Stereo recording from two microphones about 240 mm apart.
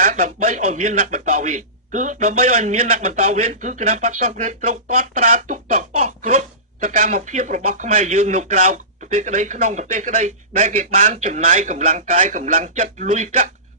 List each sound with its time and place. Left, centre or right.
0.0 s a man's voice: right